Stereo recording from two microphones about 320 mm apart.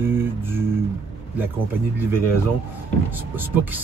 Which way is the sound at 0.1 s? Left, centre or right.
Centre.